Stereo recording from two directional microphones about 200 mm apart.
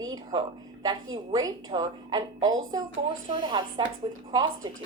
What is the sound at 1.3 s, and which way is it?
Speech, 20° right (ahead or behind).